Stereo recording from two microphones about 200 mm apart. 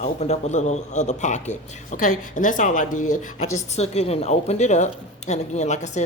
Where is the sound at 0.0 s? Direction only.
35° left (ahead or behind).